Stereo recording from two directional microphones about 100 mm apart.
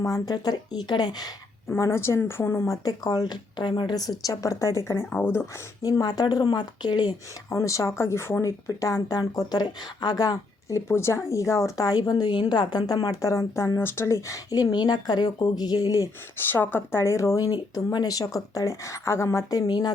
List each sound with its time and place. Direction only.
0.0 s a woman's voice: 35° left (ahead or behind)
1.8 s a woman's voice: 25° left (ahead or behind)
2.8 s speech: 40° left (ahead or behind)
4.3 s a woman's voice: 30° left (ahead or behind)
5.8 s a woman's voice: 40° left (ahead or behind)
7.5 s speech: 30° left (ahead or behind)
16.4 s speech: 20° left (ahead or behind); by 19.9 s 45° left (ahead or behind)